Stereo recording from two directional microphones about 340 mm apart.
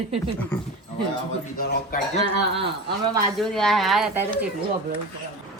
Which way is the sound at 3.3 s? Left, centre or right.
Centre.